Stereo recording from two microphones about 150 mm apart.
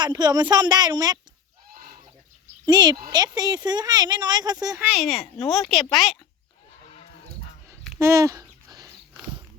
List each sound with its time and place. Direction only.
0.0 s speech: 30° right (ahead or behind)
1.7 s goose: 70° right (ahead or behind)
2.6 s speech: 30° right (ahead or behind)
4.8 s speech: 5° right (ahead or behind)
7.9 s a sound: 20° right (ahead or behind)